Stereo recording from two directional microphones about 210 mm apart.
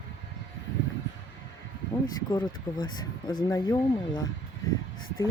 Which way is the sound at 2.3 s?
20° left (ahead or behind).